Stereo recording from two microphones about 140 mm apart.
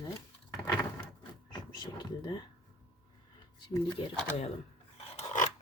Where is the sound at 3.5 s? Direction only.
35° left (ahead or behind).